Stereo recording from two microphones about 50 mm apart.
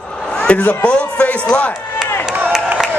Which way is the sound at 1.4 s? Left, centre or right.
Left.